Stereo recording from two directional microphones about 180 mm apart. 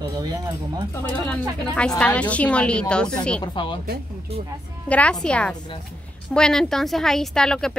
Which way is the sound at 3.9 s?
60° right (ahead or behind).